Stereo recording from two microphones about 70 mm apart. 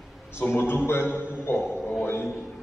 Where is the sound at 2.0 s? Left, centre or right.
Left.